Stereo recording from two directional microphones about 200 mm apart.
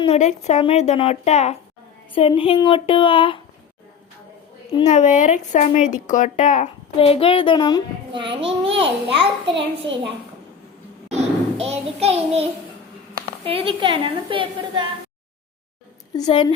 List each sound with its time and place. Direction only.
0.0 s speech: 35° left (ahead or behind)
4.9 s speech: 35° left (ahead or behind)
8.1 s a woman's voice: 25° right (ahead or behind)
9.5 s a child's voice: 60° right (ahead or behind)
11.1 s child singing: 30° right (ahead or behind)
13.4 s a woman's voice: 30° right (ahead or behind)
16.1 s speech: 20° left (ahead or behind)